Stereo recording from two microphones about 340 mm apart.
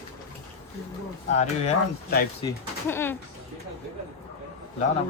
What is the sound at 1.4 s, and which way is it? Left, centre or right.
Speech, left.